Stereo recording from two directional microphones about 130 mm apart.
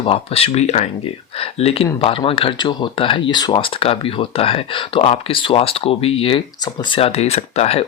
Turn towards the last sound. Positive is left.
turn(degrees=50)  # may be behind; listen again after turning